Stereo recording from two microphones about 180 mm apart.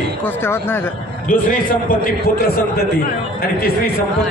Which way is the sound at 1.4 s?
50° left (ahead or behind).